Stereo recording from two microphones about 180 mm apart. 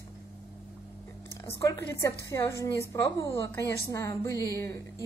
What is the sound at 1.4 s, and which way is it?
A woman's voice, 15° left (ahead or behind).